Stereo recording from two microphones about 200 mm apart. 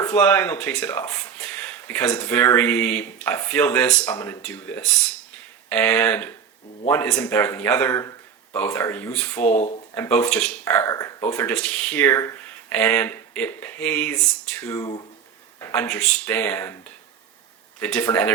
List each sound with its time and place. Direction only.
0.0 s speech: 10° left (ahead or behind)
9.6 s speech: 30° left (ahead or behind)
9.9 s speech: 5° left (ahead or behind)
15.6 s speech: 5° left (ahead or behind)
17.7 s speech: 10° left (ahead or behind)